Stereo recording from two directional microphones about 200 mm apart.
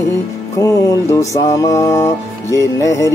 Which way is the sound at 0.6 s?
15° left (ahead or behind).